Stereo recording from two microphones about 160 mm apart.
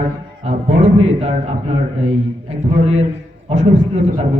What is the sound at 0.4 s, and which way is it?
A man's voice, 40° right (ahead or behind).